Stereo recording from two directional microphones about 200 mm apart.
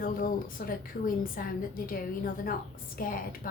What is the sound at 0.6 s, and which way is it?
A woman's voice, 45° left (ahead or behind).